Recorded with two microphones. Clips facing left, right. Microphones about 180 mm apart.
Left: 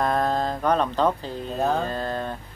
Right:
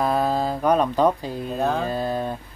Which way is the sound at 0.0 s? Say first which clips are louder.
Right 1 dB; 5° right (ahead or behind).